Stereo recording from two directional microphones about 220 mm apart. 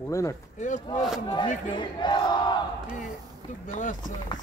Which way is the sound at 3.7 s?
35° left (ahead or behind).